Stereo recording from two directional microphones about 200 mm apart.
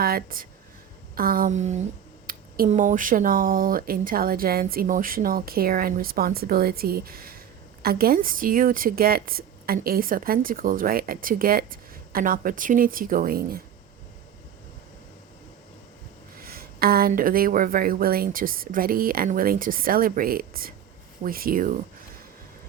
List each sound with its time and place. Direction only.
0.0 s speech: 45° right (ahead or behind)
1.1 s a sound: 45° right (ahead or behind)
2.2 s speech: 40° right (ahead or behind)
16.4 s speech: 50° right (ahead or behind)